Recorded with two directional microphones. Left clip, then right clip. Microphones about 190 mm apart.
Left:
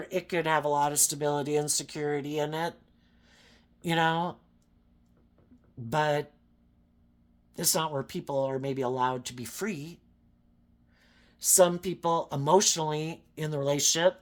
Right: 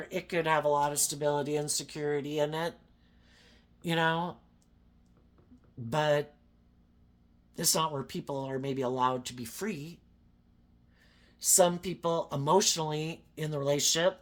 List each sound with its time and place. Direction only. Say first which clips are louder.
0.0 s speech: left 2 dB; 30° left (ahead or behind)
3.2 s a sound: left 2 dB; 30° left (ahead or behind)
5.9 s speech: left 1 dB; 30° left (ahead or behind)
7.5 s speech: left 1 dB; 30° left (ahead or behind)
11.0 s speech: left 2 dB; 30° left (ahead or behind)